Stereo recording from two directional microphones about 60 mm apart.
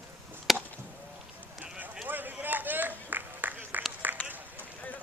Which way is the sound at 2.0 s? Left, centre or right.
Right.